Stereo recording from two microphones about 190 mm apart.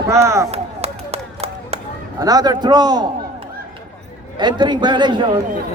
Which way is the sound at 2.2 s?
20° right (ahead or behind).